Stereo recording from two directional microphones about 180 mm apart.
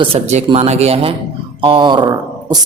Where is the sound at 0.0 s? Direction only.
35° right (ahead or behind).